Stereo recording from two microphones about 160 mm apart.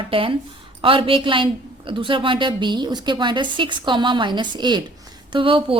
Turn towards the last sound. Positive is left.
turn(degrees=-35)  # may be behind; listen again after turning